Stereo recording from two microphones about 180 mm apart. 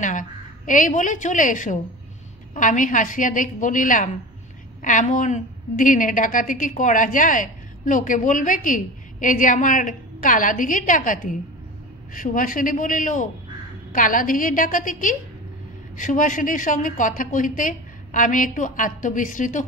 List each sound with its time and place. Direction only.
0.0 s a woman's voice: 45° left (ahead or behind)